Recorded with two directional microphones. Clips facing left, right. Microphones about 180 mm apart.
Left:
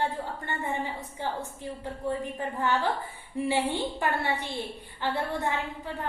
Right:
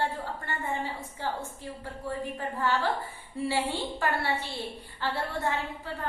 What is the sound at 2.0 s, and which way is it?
A woman's voice, 20° left (ahead or behind).